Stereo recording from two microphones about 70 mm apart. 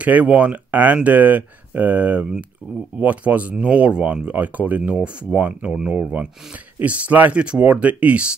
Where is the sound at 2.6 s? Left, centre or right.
Centre.